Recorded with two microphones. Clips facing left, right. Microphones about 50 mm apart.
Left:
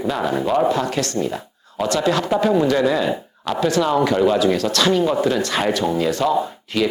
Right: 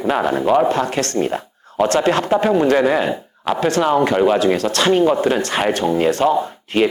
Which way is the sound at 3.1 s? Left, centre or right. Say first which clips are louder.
Right 2 dB; centre.